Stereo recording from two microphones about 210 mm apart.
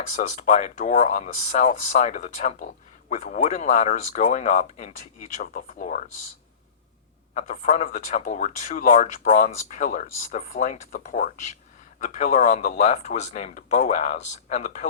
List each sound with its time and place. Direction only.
0.2 s speech: 40° left (ahead or behind)
7.3 s speech: 35° left (ahead or behind)